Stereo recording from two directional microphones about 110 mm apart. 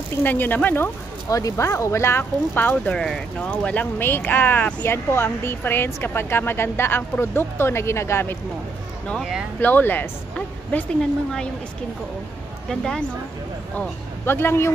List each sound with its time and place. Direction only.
0.2 s speech: 15° left (ahead or behind)
1.3 s speech: 30° left (ahead or behind)
9.2 s speech: 5° right (ahead or behind)
9.6 s speech: 15° left (ahead or behind)
12.6 s speech: 5° left (ahead or behind)
13.7 s speech: 20° left (ahead or behind)